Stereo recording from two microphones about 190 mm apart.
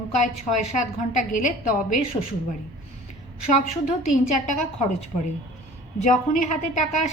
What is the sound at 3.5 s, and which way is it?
A woman's voice, 40° left (ahead or behind).